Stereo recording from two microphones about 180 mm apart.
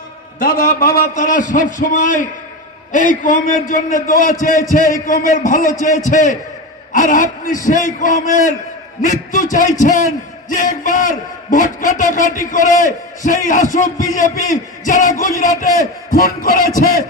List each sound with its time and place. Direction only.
0.4 s a man's voice: 55° left (ahead or behind)